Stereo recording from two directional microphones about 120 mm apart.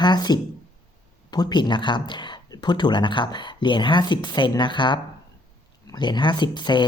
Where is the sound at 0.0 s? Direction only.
35° left (ahead or behind).